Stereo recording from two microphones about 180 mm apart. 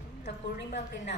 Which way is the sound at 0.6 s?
70° left (ahead or behind).